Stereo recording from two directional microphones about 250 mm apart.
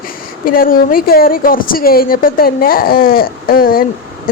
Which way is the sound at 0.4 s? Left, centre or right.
Left.